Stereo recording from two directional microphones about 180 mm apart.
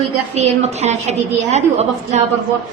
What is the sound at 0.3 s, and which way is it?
A woman's voice, 35° right (ahead or behind).